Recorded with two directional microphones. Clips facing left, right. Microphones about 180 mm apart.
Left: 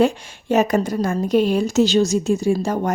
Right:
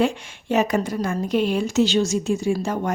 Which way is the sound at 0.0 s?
40° left (ahead or behind).